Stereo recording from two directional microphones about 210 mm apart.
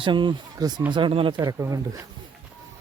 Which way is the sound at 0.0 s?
20° right (ahead or behind).